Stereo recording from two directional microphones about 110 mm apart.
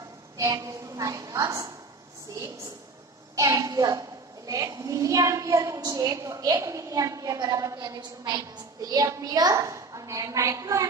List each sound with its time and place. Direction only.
0.4 s a woman's voice: 30° right (ahead or behind)
3.3 s a woman's voice: 30° right (ahead or behind)